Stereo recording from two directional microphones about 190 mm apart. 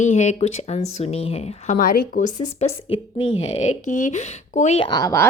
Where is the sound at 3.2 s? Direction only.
90° left.